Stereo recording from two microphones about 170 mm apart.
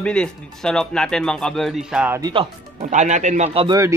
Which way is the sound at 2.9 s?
45° right (ahead or behind).